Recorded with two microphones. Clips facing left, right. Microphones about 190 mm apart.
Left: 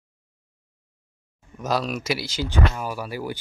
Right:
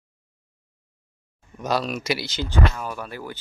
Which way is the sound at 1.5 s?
Centre (ahead or behind).